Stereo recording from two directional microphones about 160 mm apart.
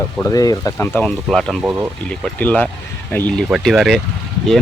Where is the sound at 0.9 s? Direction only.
5° left (ahead or behind).